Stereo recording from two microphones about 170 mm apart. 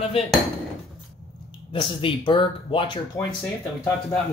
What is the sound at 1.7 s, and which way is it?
Speech, 30° left (ahead or behind).